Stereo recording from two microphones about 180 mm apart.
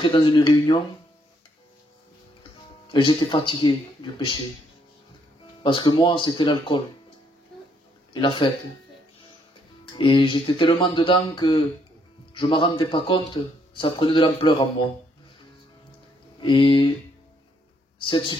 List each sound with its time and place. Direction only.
0.0 s speech: 25° left (ahead or behind)
2.9 s speech: 25° left (ahead or behind)
5.6 s speech: 25° left (ahead or behind)
8.1 s speech: 25° left (ahead or behind)
9.9 s speech: 25° left (ahead or behind)
16.3 s speech: 25° left (ahead or behind)
17.9 s speech: 30° left (ahead or behind)